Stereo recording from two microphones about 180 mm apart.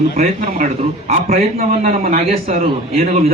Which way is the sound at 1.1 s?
40° right (ahead or behind).